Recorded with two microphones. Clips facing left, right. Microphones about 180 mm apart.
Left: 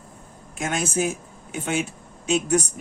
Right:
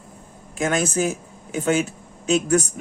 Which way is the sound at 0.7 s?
40° right (ahead or behind).